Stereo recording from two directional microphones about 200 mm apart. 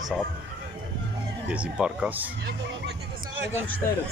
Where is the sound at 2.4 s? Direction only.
50° right (ahead or behind).